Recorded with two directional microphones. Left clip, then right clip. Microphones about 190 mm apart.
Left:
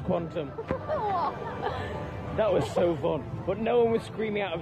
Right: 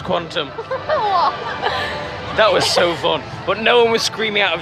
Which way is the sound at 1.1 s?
15° right (ahead or behind).